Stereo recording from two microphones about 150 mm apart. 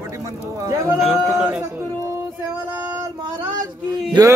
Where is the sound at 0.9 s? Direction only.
5° right (ahead or behind).